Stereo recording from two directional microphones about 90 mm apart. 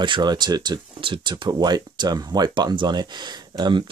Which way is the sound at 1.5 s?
50° right (ahead or behind).